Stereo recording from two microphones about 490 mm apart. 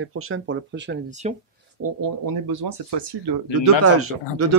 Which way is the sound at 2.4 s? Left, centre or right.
Right.